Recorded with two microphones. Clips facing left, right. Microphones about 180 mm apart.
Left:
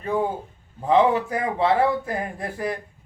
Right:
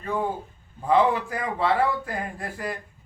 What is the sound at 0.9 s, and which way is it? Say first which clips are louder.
A man's voice: left 2 dB; 25° left (ahead or behind).